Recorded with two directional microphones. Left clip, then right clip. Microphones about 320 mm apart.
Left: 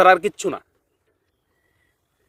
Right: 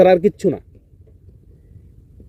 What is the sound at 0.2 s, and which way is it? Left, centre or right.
Speech, centre.